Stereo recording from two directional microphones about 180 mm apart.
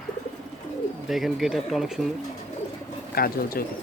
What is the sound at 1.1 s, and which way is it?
Speech, centre (ahead or behind).